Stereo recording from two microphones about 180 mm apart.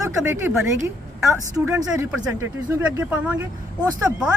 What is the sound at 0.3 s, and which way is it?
Speech, 15° right (ahead or behind).